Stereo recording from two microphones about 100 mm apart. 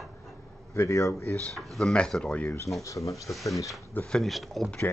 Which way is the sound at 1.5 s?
5° left (ahead or behind).